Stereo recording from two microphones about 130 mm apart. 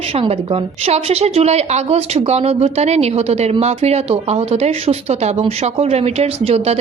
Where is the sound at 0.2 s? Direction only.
50° right (ahead or behind).